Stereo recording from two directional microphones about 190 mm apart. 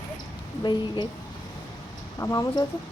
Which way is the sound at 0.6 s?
25° left (ahead or behind).